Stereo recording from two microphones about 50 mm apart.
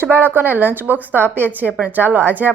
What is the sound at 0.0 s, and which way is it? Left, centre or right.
Speech, right.